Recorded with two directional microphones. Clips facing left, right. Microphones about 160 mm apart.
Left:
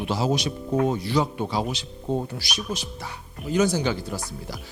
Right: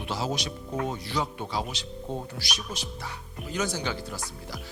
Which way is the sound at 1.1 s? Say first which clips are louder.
Left 7 dB; 35° left (ahead or behind).